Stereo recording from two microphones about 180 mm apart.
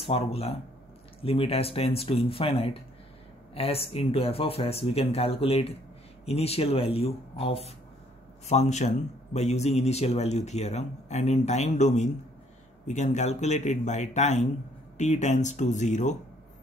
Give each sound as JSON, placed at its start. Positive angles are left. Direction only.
{"t": 0.0, "sound": "a man's voice", "side_deg": 35}